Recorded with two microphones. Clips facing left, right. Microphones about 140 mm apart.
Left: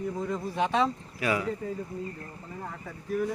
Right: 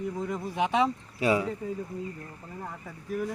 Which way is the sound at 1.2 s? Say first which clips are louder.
Right 3 dB; 25° right (ahead or behind).